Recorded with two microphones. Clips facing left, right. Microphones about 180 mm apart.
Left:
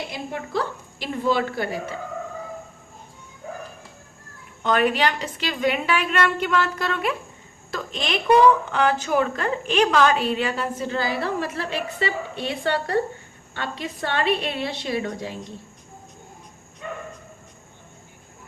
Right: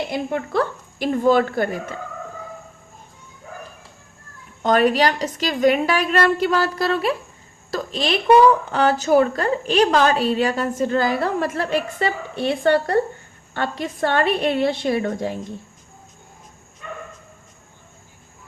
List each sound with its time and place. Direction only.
0.1 s a woman's voice: 55° right (ahead or behind)
4.6 s a woman's voice: 40° right (ahead or behind)